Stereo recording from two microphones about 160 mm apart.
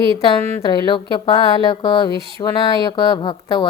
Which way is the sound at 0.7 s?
30° left (ahead or behind).